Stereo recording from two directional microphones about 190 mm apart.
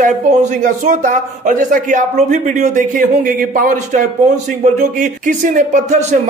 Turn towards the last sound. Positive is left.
turn(degrees=-40)  # may be behind; listen again after turning